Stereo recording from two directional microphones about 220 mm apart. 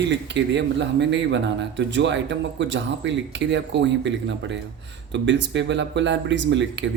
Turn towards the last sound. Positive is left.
turn(degrees=-55)  # may be behind; listen again after turning